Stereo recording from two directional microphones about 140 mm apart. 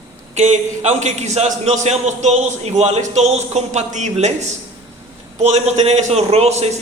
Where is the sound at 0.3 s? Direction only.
55° right (ahead or behind).